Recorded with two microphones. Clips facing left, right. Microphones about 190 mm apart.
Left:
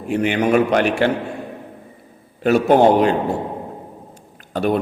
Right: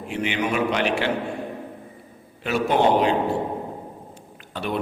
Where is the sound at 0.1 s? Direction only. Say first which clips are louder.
Left 8 dB; 45° left (ahead or behind).